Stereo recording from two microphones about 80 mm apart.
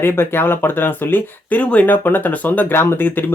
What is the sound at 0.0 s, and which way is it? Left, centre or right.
Speech, left.